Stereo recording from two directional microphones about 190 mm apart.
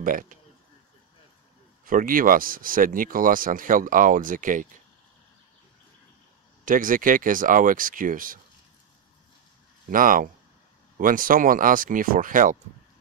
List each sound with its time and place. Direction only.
0.0 s speech: 45° right (ahead or behind)
1.9 s speech: 45° right (ahead or behind)
6.6 s speech: 45° right (ahead or behind)
9.8 s speech: 45° right (ahead or behind)